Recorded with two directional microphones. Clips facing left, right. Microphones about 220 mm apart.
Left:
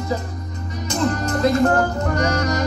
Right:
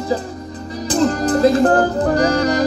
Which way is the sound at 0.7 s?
35° right (ahead or behind).